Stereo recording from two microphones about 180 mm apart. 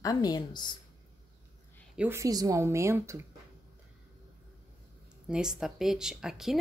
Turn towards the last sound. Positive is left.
turn(degrees=0)  # may be behind; listen again after turning